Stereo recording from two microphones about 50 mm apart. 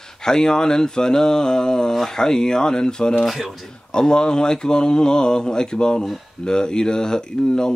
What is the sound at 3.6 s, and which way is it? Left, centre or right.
Speech, centre.